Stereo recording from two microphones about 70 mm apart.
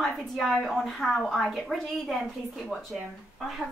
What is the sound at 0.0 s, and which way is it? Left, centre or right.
A woman's voice, centre.